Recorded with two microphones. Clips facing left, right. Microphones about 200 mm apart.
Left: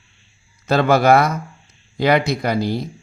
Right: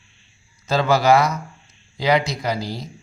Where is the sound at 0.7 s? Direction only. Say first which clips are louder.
Left 3 dB; 55° left (ahead or behind).